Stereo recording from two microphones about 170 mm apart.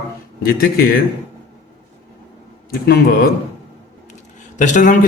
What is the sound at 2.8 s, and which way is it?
Speech, 70° left (ahead or behind).